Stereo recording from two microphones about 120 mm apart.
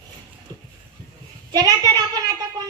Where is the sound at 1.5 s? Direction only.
35° right (ahead or behind).